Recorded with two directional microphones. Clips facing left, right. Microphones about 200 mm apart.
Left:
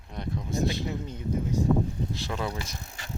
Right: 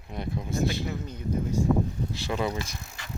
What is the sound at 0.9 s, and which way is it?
Speech, 25° left (ahead or behind).